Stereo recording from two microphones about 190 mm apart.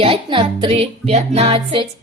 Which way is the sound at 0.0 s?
30° right (ahead or behind).